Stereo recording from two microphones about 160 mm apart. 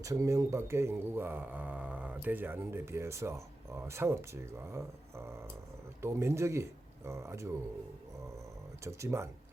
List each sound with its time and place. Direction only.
0.0 s speech: 20° right (ahead or behind)
8.8 s speech: 15° right (ahead or behind)